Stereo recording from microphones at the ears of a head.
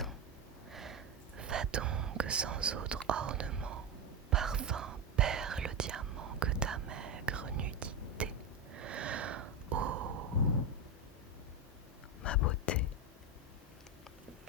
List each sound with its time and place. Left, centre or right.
1.4 s whispering: right
8.7 s a sound: right
12.2 s whispering: left